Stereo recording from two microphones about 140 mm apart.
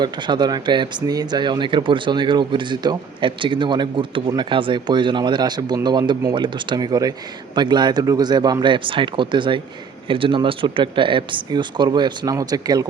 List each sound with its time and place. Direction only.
0.0 s speech: 30° right (ahead or behind)